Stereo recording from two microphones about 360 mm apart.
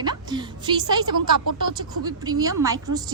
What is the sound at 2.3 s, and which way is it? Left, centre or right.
Speech, centre.